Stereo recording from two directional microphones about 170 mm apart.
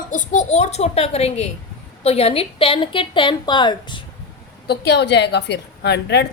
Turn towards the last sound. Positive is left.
turn(degrees=80)